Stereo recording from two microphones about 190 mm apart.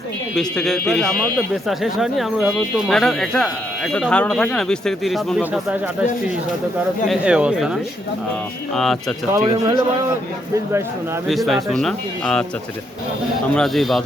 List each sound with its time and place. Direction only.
0.3 s speech: centre (ahead or behind)
7.1 s speech: 5° right (ahead or behind)
9.3 s speech: 20° right (ahead or behind)
11.3 s speech: centre (ahead or behind)
13.5 s speech: centre (ahead or behind)